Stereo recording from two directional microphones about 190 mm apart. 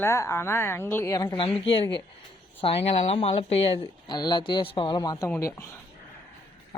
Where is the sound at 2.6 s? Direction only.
30° left (ahead or behind); by 5.6 s 15° left (ahead or behind).